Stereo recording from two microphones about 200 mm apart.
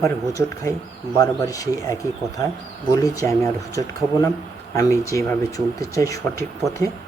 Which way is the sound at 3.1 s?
15° left (ahead or behind).